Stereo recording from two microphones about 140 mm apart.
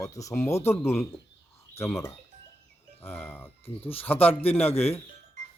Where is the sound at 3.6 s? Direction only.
45° left (ahead or behind).